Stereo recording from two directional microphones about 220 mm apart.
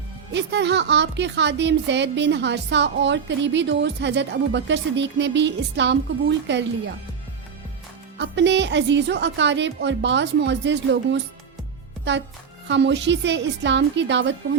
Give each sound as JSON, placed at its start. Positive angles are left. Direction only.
{"t": 0.3, "sound": "speech", "side_deg": -55}
{"t": 8.2, "sound": "speech", "side_deg": -55}